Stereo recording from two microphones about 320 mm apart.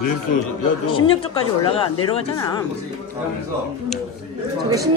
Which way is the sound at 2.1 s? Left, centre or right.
Centre.